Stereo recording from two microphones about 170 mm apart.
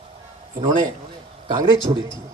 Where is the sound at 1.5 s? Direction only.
30° right (ahead or behind).